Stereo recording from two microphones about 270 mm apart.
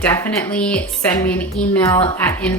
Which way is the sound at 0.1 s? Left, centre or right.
Centre.